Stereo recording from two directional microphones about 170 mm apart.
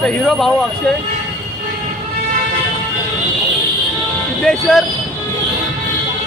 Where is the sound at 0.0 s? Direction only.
Centre (ahead or behind).